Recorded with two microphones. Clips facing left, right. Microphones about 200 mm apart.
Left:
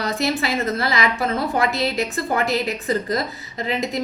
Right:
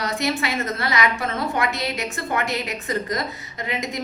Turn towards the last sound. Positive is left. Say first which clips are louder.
# left 4 dB
turn(degrees=35)  # may be behind; listen again after turning